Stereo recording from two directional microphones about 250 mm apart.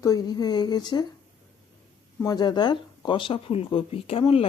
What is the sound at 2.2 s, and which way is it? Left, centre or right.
Speech, centre.